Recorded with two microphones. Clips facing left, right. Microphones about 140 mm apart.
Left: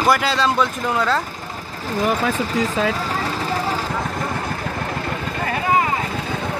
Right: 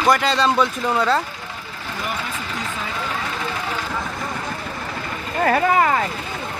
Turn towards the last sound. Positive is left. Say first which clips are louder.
# right 3 dB
turn(degrees=-55)  # may be behind; listen again after turning